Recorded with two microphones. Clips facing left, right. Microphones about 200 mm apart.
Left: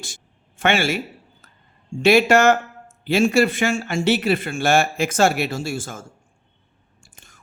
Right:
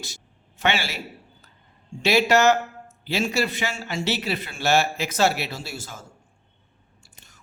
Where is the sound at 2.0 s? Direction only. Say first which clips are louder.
Left 4 dB; 50° left (ahead or behind).